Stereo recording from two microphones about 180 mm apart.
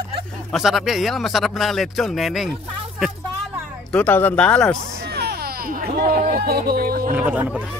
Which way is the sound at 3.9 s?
10° left (ahead or behind).